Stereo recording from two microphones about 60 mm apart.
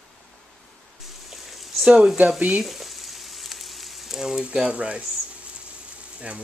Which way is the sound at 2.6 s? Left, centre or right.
Centre.